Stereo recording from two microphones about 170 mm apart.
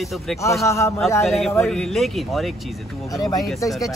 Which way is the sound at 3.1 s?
20° left (ahead or behind).